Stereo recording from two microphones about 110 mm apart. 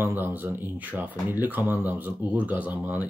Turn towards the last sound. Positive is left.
turn(degrees=-15)  # may be behind; listen again after turning